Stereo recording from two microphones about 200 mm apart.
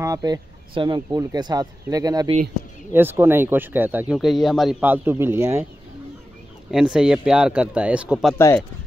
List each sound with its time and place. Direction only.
0.0 s speech: 20° right (ahead or behind)
6.7 s speech: 5° right (ahead or behind)